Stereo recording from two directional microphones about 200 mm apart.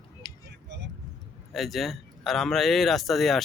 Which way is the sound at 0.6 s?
60° right (ahead or behind).